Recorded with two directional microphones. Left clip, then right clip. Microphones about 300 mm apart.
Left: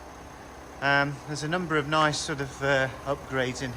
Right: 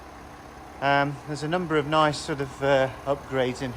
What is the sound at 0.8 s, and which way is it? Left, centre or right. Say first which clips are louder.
A man's voice: right 1 dB; centre.